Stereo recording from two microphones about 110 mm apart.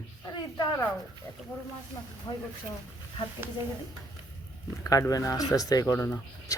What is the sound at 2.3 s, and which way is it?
Speech, 40° left (ahead or behind).